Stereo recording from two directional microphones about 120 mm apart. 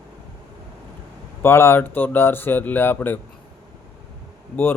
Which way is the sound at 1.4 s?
20° left (ahead or behind).